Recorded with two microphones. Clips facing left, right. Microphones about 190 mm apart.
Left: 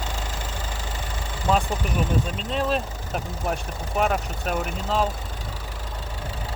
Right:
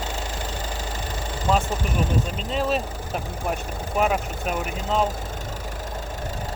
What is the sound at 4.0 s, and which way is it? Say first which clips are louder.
Speech: right 1 dB; centre (ahead or behind).